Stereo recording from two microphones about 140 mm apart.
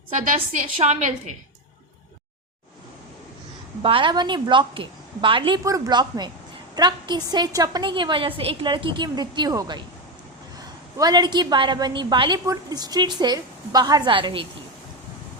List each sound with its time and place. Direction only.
0.3 s a woman's voice: 50° right (ahead or behind)
3.8 s a woman's voice: 40° right (ahead or behind)
5.6 s a woman's voice: 25° right (ahead or behind)